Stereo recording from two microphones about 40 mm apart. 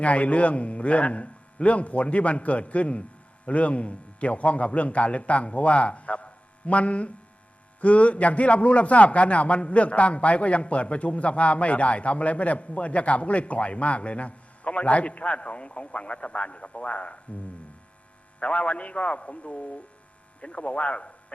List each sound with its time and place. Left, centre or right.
0.0 s a man's voice: left
18.3 s a man's voice: left